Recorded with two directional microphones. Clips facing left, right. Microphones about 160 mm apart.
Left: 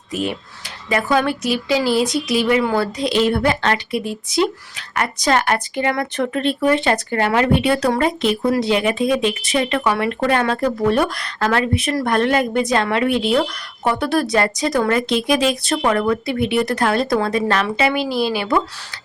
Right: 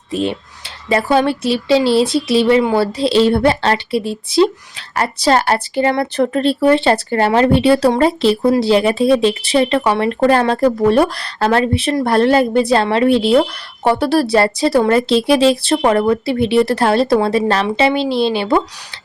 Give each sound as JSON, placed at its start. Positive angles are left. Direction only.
{"t": 0.1, "sound": "speech", "side_deg": -25}